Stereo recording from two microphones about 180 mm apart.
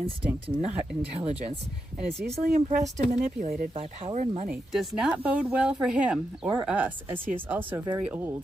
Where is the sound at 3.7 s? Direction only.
30° right (ahead or behind).